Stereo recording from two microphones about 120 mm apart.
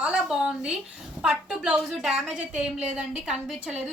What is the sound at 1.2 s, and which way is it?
A woman's voice, 5° right (ahead or behind).